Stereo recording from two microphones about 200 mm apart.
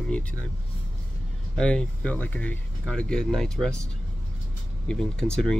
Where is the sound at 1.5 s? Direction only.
5° left (ahead or behind).